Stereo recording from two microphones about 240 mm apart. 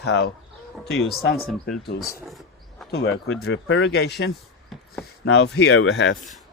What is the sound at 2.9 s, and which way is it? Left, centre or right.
Speech, left.